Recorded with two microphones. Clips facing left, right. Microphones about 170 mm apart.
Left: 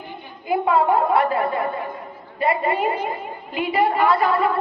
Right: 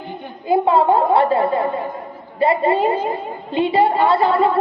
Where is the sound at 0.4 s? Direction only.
30° right (ahead or behind).